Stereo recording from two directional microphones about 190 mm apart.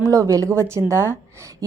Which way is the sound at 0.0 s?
20° right (ahead or behind).